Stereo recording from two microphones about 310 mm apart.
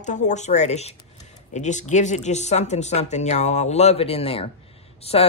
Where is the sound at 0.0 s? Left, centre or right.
Left.